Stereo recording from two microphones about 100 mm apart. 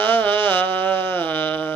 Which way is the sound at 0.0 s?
20° left (ahead or behind).